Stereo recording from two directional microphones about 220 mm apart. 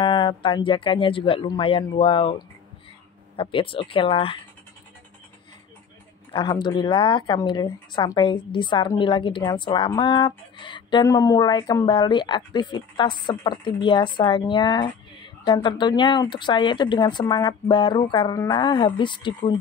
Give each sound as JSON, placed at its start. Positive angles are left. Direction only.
{"t": 0.0, "sound": "speech", "side_deg": 20}
{"t": 6.3, "sound": "speech", "side_deg": 20}